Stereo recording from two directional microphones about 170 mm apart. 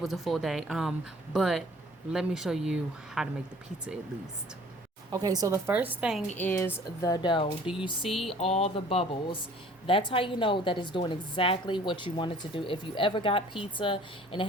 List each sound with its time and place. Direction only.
0.0 s speech: centre (ahead or behind)
5.1 s a woman's voice: 20° right (ahead or behind); by 6.2 s 5° right (ahead or behind)
6.3 s a woman's voice: 10° left (ahead or behind); by 7.4 s 25° left (ahead or behind)
7.7 s speech: 5° right (ahead or behind)
8.4 s a woman's voice: 35° left (ahead or behind)